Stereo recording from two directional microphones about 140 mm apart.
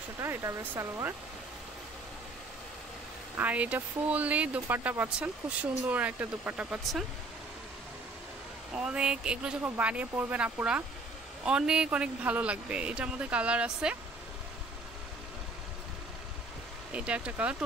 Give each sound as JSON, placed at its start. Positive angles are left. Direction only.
{"t": 0.2, "sound": "speech", "side_deg": -20}
{"t": 3.3, "sound": "speech", "side_deg": -10}
{"t": 8.7, "sound": "speech", "side_deg": -5}
{"t": 16.9, "sound": "speech", "side_deg": -10}